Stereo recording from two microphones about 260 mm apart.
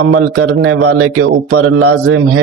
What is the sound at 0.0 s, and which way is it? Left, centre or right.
A man's voice, right.